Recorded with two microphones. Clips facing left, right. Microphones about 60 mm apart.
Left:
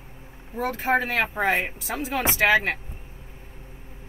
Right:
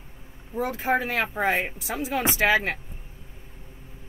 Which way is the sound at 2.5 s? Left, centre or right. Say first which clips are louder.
Left 2 dB; left.